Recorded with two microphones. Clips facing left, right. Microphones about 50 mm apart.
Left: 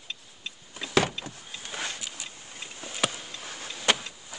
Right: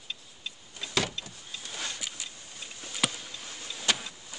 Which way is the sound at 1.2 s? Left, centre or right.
Left.